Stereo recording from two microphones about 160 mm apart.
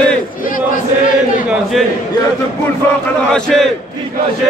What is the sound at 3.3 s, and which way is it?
Speech, centre (ahead or behind).